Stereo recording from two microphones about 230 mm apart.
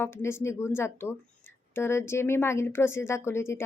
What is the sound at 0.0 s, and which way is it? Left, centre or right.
A woman's voice, centre.